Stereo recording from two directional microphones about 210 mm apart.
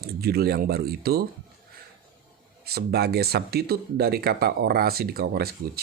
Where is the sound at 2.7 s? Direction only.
50° right (ahead or behind).